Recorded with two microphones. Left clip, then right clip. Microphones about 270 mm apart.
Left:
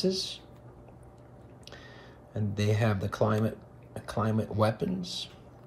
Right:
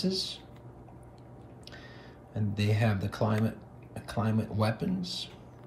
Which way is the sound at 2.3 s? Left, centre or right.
Centre.